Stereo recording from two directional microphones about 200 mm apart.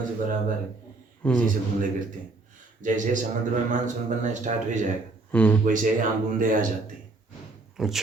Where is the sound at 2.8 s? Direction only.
40° right (ahead or behind).